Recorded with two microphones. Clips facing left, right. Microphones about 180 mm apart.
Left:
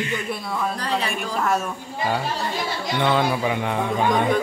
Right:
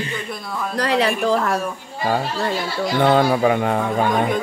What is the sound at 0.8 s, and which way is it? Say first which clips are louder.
Speech: right 7 dB; 90° right.